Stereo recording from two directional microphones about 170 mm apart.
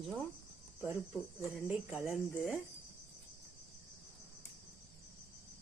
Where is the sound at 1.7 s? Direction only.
5° right (ahead or behind).